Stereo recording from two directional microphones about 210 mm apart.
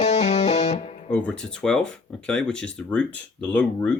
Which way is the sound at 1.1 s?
5° left (ahead or behind).